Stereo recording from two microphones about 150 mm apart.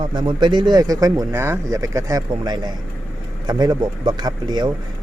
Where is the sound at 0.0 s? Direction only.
30° right (ahead or behind).